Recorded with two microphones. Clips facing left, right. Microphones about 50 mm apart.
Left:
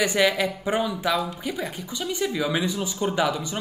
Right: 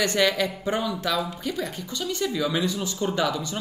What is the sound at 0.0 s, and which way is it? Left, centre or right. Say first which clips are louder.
Speech: left 1 dB; centre.